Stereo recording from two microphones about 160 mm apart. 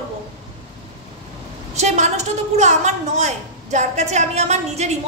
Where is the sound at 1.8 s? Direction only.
45° right (ahead or behind).